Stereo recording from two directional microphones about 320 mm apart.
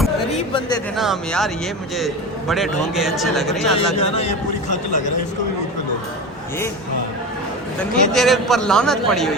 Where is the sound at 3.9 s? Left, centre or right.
Centre.